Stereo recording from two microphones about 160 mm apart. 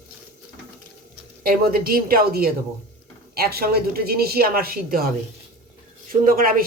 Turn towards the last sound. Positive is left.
turn(degrees=-65)  # may be behind; listen again after turning